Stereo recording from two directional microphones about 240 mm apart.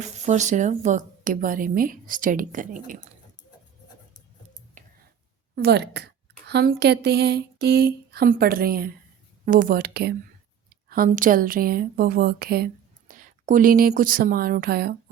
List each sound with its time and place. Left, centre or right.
0.0 s a woman's voice: right
4.8 s clicking: right
5.5 s a woman's voice: right